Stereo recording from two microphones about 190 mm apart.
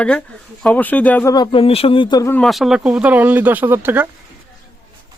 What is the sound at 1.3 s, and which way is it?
Speech, 25° left (ahead or behind).